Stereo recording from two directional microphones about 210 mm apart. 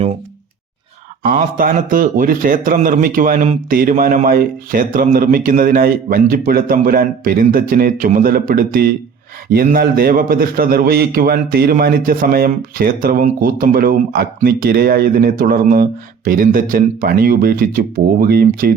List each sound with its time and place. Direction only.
1.2 s a man's voice: 40° right (ahead or behind)